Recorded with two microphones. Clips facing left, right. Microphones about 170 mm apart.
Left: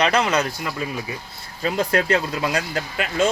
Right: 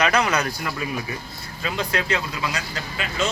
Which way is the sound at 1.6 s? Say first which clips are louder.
Left 5 dB; 45° left (ahead or behind).